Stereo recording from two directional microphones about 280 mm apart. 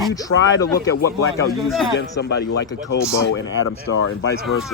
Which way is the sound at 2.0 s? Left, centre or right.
Left.